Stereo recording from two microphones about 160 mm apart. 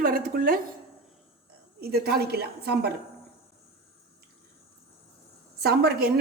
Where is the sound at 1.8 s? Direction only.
75° right (ahead or behind).